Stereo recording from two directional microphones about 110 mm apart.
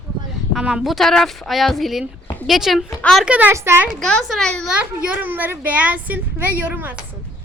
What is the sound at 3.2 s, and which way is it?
Speech, 15° right (ahead or behind).